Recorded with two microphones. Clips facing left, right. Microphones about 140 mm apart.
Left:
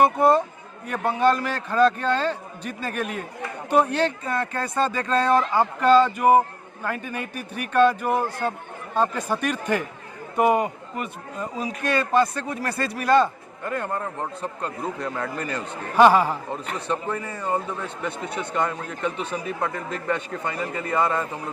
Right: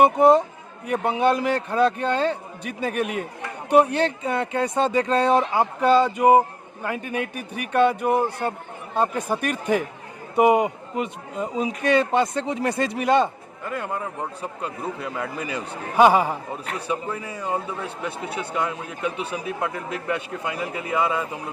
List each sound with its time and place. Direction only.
0.0 s a man's voice: 15° right (ahead or behind)
13.7 s a man's voice: 5° right (ahead or behind)